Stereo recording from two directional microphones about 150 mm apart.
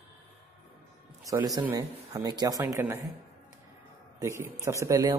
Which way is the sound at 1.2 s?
25° right (ahead or behind).